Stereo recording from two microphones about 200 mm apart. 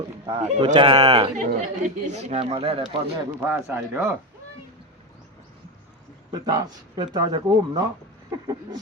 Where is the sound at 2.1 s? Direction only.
35° right (ahead or behind).